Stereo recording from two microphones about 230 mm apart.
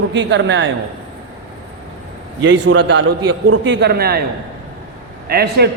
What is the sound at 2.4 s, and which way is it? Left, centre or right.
A man's voice, right.